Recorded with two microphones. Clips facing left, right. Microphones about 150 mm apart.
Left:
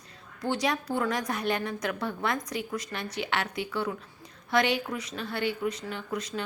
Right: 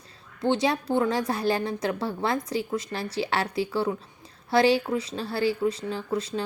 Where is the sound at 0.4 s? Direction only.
25° right (ahead or behind).